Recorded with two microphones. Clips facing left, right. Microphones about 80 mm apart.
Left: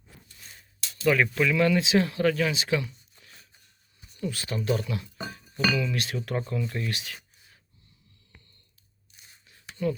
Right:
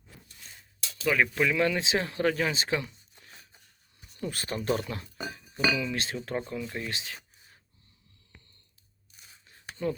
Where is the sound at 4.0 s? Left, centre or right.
Right.